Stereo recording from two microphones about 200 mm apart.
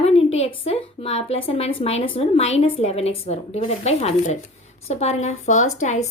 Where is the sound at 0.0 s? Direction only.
30° left (ahead or behind).